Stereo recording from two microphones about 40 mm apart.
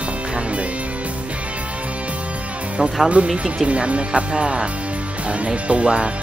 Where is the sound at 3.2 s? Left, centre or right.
Right.